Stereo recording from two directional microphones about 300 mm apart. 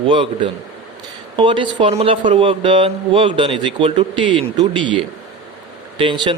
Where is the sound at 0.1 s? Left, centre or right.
Centre.